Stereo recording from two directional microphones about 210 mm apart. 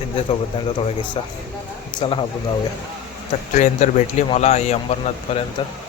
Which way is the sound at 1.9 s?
20° left (ahead or behind).